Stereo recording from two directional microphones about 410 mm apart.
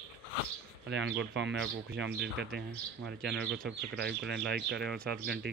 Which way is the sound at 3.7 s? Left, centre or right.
Right.